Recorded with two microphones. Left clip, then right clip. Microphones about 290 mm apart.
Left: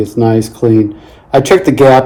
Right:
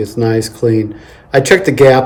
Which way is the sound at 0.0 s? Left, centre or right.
Centre.